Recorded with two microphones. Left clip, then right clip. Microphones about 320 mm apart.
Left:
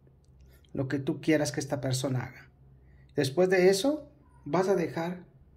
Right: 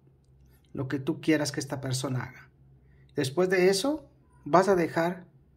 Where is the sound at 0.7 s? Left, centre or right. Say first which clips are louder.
Even; centre.